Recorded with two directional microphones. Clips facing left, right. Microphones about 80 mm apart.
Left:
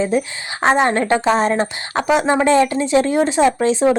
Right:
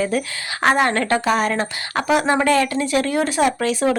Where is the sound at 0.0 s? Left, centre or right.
Left.